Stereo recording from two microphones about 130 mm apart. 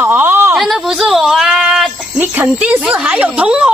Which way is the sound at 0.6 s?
Centre (ahead or behind).